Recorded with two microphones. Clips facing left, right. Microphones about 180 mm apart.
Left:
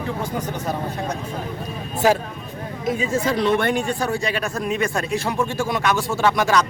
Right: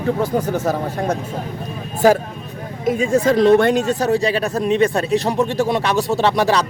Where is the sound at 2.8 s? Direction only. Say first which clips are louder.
Right 6 dB; 50° right (ahead or behind); by 6.6 s 30° right (ahead or behind).